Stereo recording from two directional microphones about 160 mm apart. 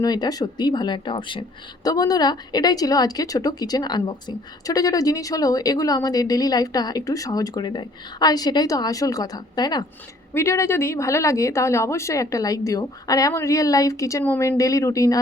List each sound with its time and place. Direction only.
0.0 s speech: 25° left (ahead or behind)